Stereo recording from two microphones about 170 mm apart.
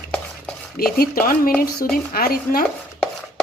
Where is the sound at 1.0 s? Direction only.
60° left (ahead or behind).